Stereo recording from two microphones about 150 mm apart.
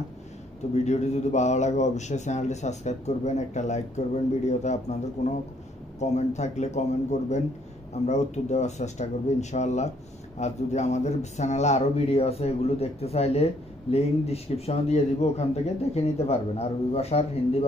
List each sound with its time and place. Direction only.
0.8 s speech: 50° left (ahead or behind)